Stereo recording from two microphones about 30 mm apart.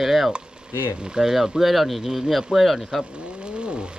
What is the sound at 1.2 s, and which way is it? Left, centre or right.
Speech, centre.